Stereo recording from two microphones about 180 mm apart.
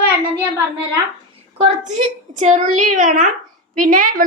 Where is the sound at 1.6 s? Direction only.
40° right (ahead or behind).